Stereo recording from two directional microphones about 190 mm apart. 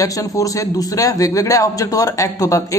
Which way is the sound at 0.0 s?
15° left (ahead or behind).